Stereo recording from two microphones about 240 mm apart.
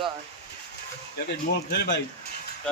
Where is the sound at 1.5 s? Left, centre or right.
Left.